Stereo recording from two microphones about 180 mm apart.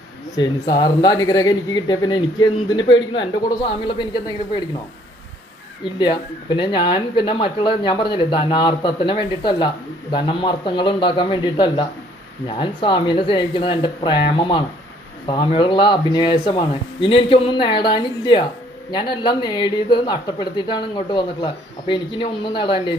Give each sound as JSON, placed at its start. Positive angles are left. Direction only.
{"t": 0.4, "sound": "speech", "side_deg": 25}
{"t": 6.0, "sound": "speech", "side_deg": 25}